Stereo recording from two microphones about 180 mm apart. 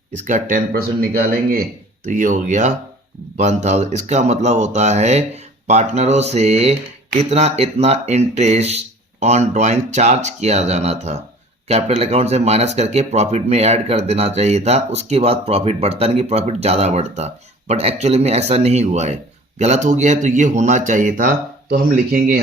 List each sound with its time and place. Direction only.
0.3 s speech: 45° right (ahead or behind)
2.0 s speech: 45° right (ahead or behind)